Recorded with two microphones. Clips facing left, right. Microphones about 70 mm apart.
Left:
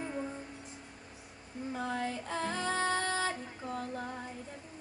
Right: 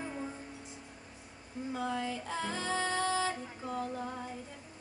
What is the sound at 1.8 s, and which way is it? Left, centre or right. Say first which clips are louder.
Music: left 1 dB; left.